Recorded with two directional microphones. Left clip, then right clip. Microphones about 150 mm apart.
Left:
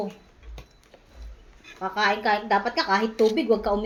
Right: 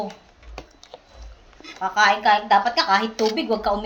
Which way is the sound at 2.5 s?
25° left (ahead or behind).